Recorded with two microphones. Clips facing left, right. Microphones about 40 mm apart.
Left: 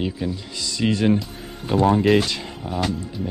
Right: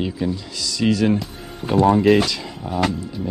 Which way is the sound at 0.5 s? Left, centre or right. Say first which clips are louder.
Right 2 dB; left.